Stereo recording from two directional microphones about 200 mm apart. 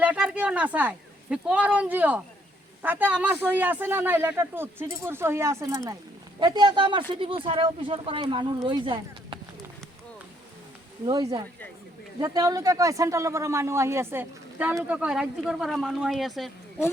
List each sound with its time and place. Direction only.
0.0 s speech: 5° right (ahead or behind); by 9.4 s 25° right (ahead or behind)
11.0 s speech: 20° right (ahead or behind); by 16.5 s centre (ahead or behind)